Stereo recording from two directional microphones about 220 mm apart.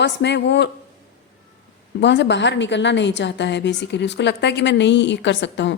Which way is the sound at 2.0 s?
50° left (ahead or behind).